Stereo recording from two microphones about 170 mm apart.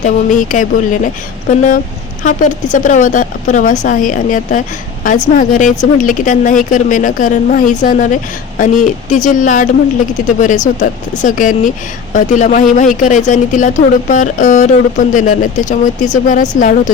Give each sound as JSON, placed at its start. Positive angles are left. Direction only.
{"t": 0.0, "sound": "speech", "side_deg": 50}